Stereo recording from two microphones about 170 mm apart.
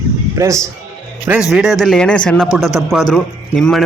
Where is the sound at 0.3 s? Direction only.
20° right (ahead or behind).